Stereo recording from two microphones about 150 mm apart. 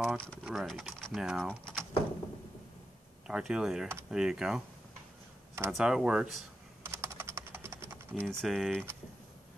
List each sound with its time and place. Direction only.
0.0 s speech: centre (ahead or behind)
3.3 s speech: 5° right (ahead or behind)
5.7 s speech: centre (ahead or behind)
6.8 s computer keyboard: 20° right (ahead or behind)
8.1 s speech: 5° left (ahead or behind)